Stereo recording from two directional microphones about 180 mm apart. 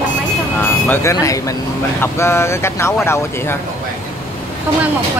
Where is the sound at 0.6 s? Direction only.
10° left (ahead or behind).